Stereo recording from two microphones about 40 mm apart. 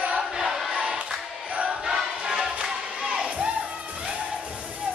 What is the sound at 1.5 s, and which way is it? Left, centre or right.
Choir, right.